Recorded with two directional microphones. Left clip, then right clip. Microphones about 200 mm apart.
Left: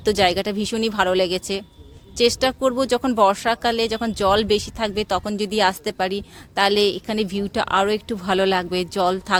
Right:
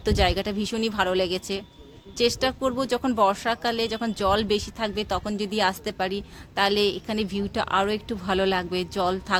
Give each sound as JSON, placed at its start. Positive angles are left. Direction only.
{"t": 0.0, "sound": "speech", "side_deg": 35}